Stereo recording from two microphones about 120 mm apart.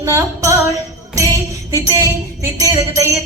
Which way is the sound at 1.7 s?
25° right (ahead or behind).